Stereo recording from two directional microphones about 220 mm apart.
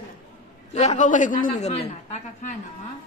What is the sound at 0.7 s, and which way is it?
A woman's voice, 35° left (ahead or behind).